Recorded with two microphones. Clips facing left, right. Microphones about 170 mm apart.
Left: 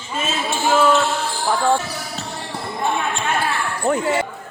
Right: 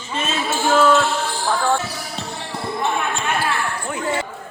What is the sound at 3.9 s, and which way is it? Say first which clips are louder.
Speech: left 9 dB; 75° left (ahead or behind).